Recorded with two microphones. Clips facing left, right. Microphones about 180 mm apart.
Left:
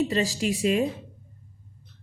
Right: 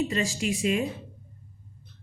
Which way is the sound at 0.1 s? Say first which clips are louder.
Left 3 dB; 40° left (ahead or behind).